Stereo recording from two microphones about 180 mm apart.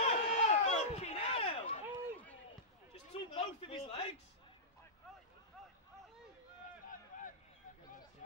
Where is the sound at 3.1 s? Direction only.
30° left (ahead or behind).